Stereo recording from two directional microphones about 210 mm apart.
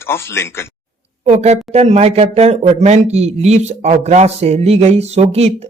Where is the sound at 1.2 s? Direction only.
35° right (ahead or behind).